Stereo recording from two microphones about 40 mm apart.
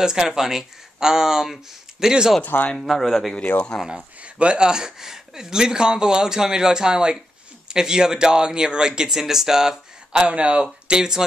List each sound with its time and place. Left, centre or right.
0.0 s speech: centre
2.8 s a man's voice: centre
3.7 s speech: centre
4.2 s speech: right; by 10.2 s centre
10.2 s speech: right